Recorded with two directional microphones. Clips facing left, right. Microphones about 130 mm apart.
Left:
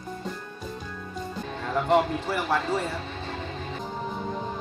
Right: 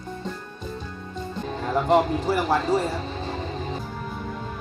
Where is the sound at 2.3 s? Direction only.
35° right (ahead or behind).